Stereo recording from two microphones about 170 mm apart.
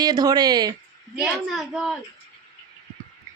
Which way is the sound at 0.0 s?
25° right (ahead or behind).